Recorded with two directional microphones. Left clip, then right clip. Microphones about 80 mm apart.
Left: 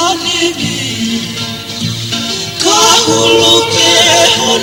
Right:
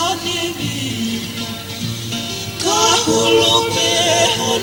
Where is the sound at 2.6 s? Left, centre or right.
Left.